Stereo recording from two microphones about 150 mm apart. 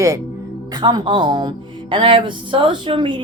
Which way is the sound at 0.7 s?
30° right (ahead or behind).